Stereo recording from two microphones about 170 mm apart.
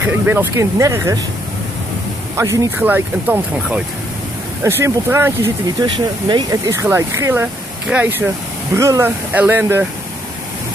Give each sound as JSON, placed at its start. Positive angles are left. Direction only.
{"t": 0.0, "sound": "speech", "side_deg": -10}
{"t": 2.3, "sound": "speech", "side_deg": -20}
{"t": 5.9, "sound": "speech", "side_deg": -25}